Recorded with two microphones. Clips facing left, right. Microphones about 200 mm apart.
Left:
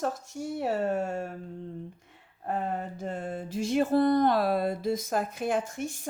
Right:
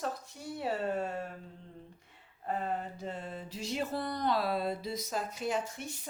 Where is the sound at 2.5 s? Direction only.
50° left (ahead or behind).